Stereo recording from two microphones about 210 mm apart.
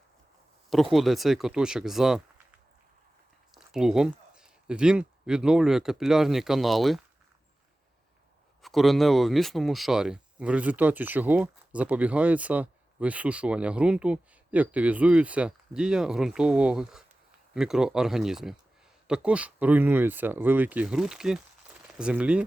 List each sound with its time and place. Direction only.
0.7 s speech: centre (ahead or behind)
3.5 s speech: centre (ahead or behind)
8.6 s speech: centre (ahead or behind)